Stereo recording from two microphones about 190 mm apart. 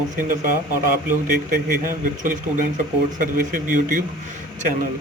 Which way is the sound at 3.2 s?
45° right (ahead or behind).